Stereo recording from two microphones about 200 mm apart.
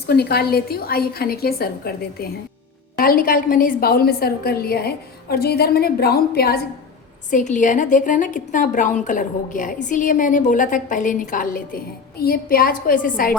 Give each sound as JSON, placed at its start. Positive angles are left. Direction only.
{"t": 0.1, "sound": "a woman's voice", "side_deg": 55}
{"t": 7.3, "sound": "a woman's voice", "side_deg": 40}